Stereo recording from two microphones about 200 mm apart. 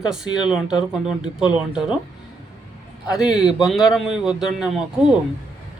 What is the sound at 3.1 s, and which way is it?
Speech, 5° right (ahead or behind).